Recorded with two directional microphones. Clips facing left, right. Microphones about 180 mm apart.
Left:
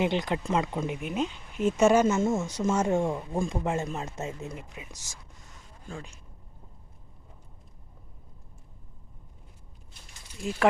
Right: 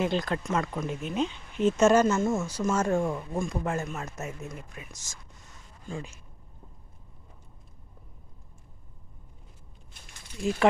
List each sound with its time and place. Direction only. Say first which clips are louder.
0.0 s speech: left 1 dB; 15° left (ahead or behind)
4.7 s speech: left 1 dB; 15° left (ahead or behind)
5.9 s speech: right 3 dB; 5° right (ahead or behind)